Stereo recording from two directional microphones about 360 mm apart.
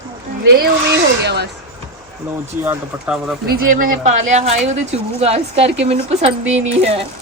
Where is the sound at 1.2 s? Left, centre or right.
Right.